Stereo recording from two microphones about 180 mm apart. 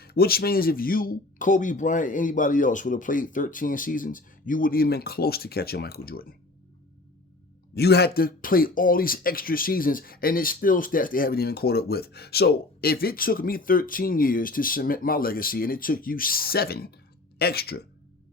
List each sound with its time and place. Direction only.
0.0 s speech: 60° left (ahead or behind)
7.8 s speech: 65° left (ahead or behind)